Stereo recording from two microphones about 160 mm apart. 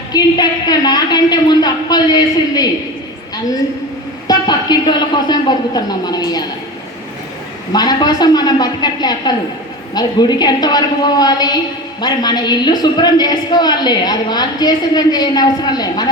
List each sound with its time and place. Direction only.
0.1 s a woman's voice: 25° left (ahead or behind)
4.3 s a woman's voice: 25° left (ahead or behind)
7.7 s a woman's voice: 25° left (ahead or behind)